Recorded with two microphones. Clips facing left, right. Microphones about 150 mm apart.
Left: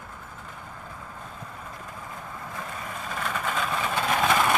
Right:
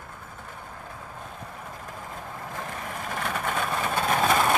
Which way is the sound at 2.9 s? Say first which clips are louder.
Right 1 dB; 60° right (ahead or behind).